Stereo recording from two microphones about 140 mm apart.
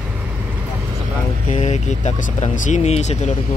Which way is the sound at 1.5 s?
60° left (ahead or behind).